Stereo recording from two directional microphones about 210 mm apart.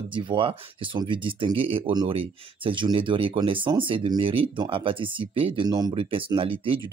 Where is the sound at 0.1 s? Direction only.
25° right (ahead or behind).